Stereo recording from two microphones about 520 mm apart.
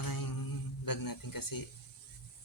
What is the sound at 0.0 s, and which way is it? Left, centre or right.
Mantra, left.